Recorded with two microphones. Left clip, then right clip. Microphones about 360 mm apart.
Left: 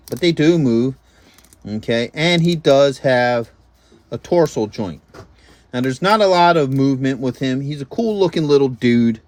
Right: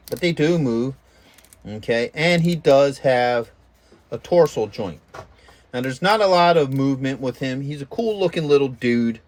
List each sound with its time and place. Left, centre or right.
0.3 s speech: centre